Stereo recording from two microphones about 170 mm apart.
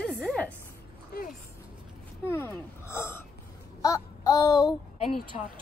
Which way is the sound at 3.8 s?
20° left (ahead or behind).